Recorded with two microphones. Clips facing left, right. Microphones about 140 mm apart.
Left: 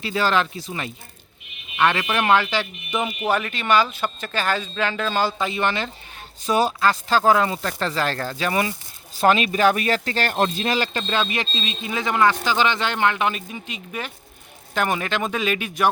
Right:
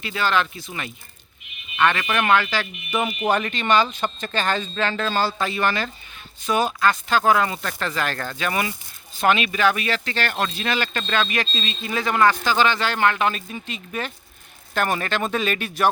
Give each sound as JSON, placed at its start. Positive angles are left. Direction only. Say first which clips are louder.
{"t": 0.0, "sound": "speech", "louder": "left 2 dB", "side_deg": 35}
{"t": 2.1, "sound": "speech", "louder": "left 1 dB", "side_deg": 30}
{"t": 2.9, "sound": "speech", "louder": "right 1 dB", "side_deg": 0}
{"t": 6.4, "sound": "speech", "louder": "left 1 dB", "side_deg": 35}